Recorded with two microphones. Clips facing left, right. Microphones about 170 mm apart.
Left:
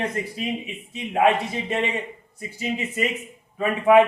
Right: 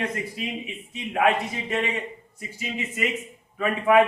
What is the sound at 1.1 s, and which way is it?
Speech, 30° left (ahead or behind).